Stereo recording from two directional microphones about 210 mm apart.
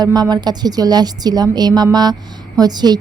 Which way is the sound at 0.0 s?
20° right (ahead or behind).